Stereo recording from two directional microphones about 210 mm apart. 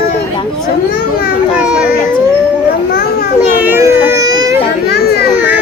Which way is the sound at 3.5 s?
10° right (ahead or behind).